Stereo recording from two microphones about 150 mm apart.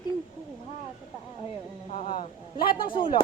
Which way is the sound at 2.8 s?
35° left (ahead or behind).